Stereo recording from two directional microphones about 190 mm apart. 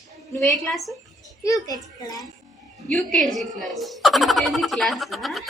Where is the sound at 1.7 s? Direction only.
Centre (ahead or behind).